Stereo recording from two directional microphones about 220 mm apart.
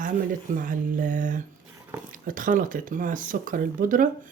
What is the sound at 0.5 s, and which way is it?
Speech, 40° right (ahead or behind).